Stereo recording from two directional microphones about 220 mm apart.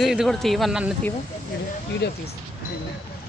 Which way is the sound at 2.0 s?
45° left (ahead or behind).